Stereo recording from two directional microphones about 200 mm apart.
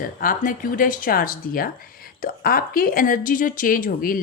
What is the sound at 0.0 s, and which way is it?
Speech, 45° left (ahead or behind).